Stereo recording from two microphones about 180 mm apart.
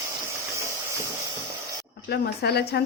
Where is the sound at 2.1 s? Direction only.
65° left (ahead or behind).